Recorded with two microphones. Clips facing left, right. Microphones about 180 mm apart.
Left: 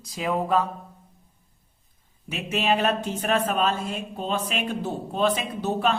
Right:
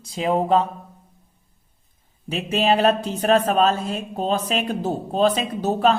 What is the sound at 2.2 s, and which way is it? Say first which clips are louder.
Speech: right 4 dB; 35° right (ahead or behind).